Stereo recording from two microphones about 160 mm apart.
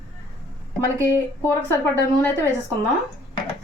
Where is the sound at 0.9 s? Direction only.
15° right (ahead or behind).